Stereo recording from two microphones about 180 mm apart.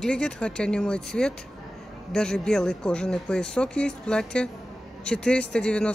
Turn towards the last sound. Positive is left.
turn(degrees=5)  # may be behind; listen again after turning